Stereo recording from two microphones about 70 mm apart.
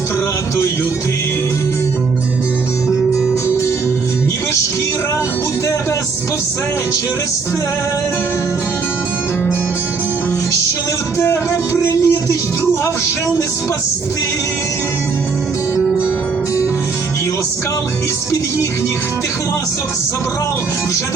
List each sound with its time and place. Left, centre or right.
11.2 s speech: left